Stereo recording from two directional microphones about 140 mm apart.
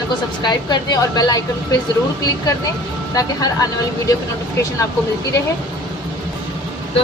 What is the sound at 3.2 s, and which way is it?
Speech, 25° left (ahead or behind).